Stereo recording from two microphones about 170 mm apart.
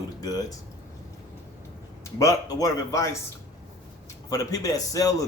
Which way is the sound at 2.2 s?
20° left (ahead or behind).